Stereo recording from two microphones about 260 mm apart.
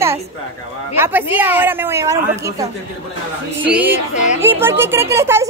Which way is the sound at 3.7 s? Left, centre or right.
Centre.